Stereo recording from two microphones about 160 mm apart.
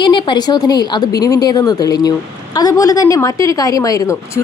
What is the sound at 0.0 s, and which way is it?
A woman's voice, 30° left (ahead or behind).